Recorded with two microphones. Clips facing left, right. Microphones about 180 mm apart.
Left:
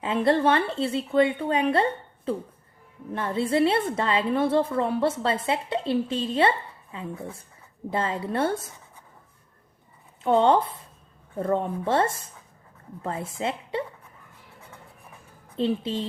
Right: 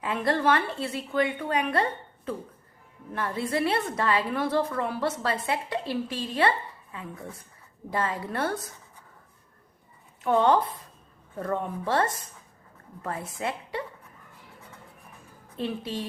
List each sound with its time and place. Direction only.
0.0 s a woman's voice: 25° left (ahead or behind)
3.1 s a woman's voice: 25° left (ahead or behind)
10.2 s a woman's voice: 25° left (ahead or behind)
15.5 s a woman's voice: 25° left (ahead or behind)